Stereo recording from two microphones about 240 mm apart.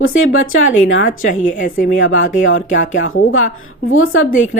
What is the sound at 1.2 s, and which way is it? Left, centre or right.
Speech, left.